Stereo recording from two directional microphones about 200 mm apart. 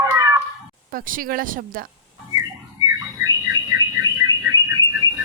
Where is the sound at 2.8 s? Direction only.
15° right (ahead or behind).